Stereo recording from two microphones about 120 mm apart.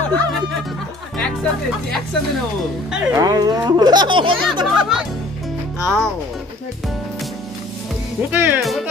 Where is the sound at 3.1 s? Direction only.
30° right (ahead or behind).